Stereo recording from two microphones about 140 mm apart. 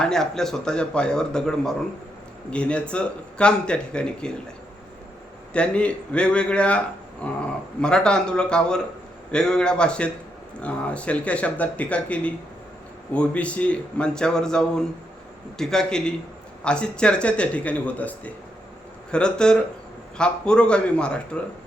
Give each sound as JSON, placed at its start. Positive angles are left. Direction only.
{"t": 0.0, "sound": "speech", "side_deg": 5}
{"t": 5.5, "sound": "speech", "side_deg": 10}